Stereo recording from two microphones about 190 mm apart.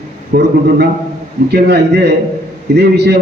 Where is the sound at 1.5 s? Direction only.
60° right (ahead or behind).